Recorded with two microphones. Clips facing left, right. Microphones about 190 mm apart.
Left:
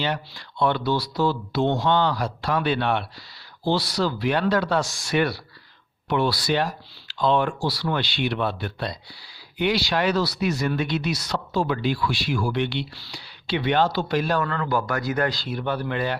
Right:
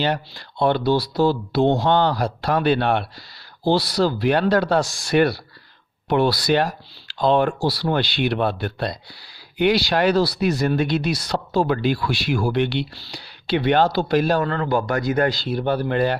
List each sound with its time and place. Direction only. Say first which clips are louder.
0.0 s speech: right 4 dB; 35° right (ahead or behind)
9.6 s speech: right 4 dB; 40° right (ahead or behind)
14.8 s speech: right 4 dB; 20° right (ahead or behind); by 16.1 s 40° right (ahead or behind)